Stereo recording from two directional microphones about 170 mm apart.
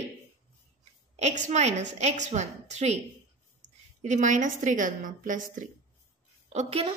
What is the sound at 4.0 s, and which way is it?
A woman's voice, 45° right (ahead or behind).